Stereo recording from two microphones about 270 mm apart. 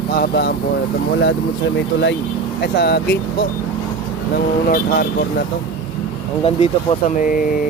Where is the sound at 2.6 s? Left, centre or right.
Left.